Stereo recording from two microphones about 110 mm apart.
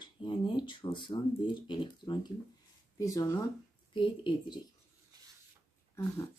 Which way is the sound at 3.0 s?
30° left (ahead or behind).